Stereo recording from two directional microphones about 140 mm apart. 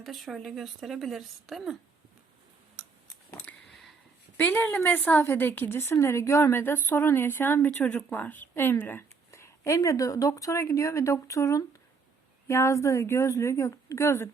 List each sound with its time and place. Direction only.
0.0 s speech: centre (ahead or behind)
3.3 s a sound: 5° left (ahead or behind)
4.4 s a woman's voice: 10° left (ahead or behind)